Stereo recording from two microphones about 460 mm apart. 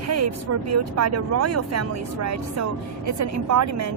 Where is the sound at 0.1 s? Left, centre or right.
Right.